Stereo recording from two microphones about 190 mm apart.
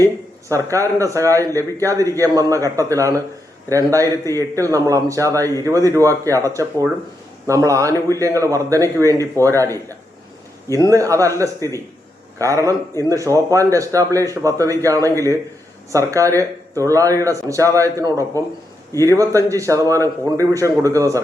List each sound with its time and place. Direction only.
0.0 s speech: 15° right (ahead or behind)